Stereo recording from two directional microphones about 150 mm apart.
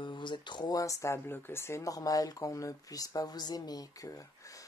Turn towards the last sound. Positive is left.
turn(degrees=20)  # may be behind; listen again after turning